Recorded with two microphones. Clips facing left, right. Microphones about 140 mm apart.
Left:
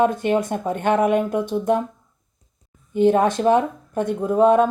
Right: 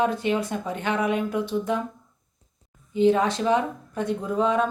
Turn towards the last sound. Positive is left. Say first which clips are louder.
# left 7 dB
turn(degrees=50)  # may be behind; listen again after turning